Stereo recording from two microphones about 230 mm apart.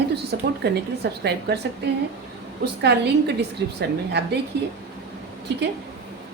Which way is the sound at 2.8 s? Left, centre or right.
Right.